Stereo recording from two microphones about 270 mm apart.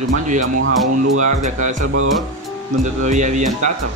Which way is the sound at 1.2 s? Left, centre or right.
Right.